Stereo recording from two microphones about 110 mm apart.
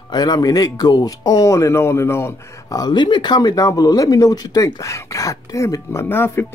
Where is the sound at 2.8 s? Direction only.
45° left (ahead or behind).